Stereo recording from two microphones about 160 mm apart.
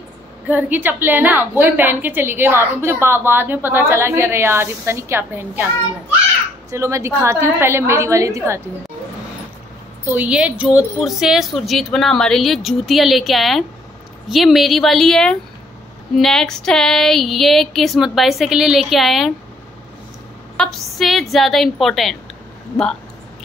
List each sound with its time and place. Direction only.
0.5 s a woman's voice: 10° right (ahead or behind)
6.7 s a woman's voice: 20° right (ahead or behind)
10.0 s a woman's voice: 10° right (ahead or behind)
20.5 s a woman's voice: centre (ahead or behind)